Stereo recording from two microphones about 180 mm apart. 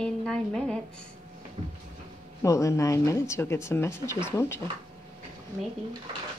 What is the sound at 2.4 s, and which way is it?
Speech, 15° left (ahead or behind).